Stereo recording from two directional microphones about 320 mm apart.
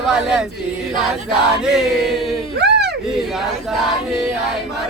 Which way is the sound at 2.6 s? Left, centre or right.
Right.